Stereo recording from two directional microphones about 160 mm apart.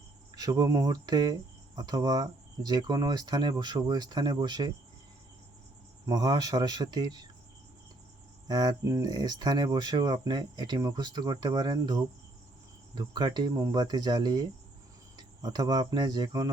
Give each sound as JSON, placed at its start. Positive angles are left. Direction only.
{"t": 0.3, "sound": "speech", "side_deg": -25}
{"t": 6.1, "sound": "speech", "side_deg": -25}
{"t": 8.4, "sound": "speech", "side_deg": -25}